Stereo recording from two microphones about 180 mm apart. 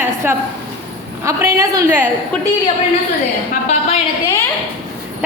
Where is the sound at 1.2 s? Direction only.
15° right (ahead or behind).